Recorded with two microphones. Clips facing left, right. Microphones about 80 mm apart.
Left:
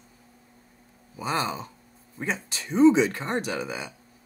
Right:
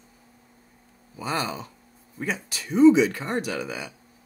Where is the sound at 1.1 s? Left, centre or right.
Left.